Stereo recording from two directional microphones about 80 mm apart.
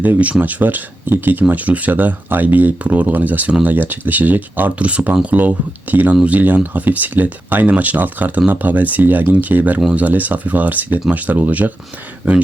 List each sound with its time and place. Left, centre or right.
0.0 s speech: centre